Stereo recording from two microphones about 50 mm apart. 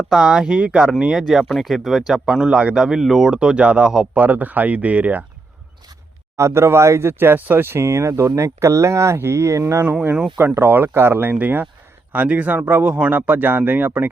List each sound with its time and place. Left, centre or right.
0.1 s speech: centre
1.2 s speech: centre
3.3 s speech: right
4.1 s speech: right
6.3 s speech: right
7.0 s speech: right
10.5 s speech: right